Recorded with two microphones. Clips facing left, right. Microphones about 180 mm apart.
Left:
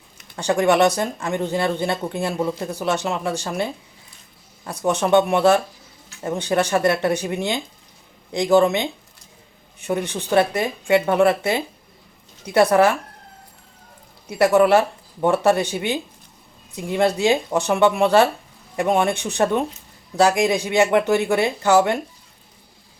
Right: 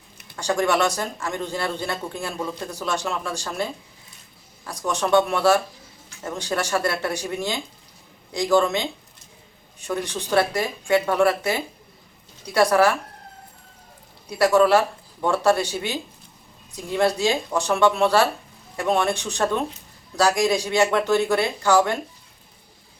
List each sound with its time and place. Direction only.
0.6 s a man's voice: 20° left (ahead or behind)
4.9 s a man's voice: 20° left (ahead or behind)
14.3 s a man's voice: 15° left (ahead or behind)